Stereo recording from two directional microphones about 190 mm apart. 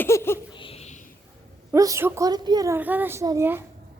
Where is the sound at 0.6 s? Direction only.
35° left (ahead or behind).